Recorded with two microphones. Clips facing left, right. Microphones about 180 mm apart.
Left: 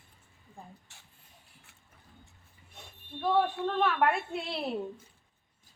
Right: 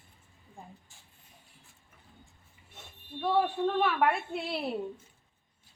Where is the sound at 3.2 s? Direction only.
5° right (ahead or behind).